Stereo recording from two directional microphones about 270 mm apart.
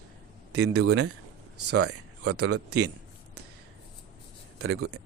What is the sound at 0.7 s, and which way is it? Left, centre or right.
Speech, right.